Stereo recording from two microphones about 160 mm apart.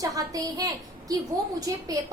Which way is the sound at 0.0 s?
20° right (ahead or behind).